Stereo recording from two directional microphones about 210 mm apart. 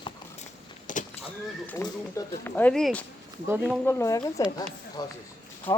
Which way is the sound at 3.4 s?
10° right (ahead or behind).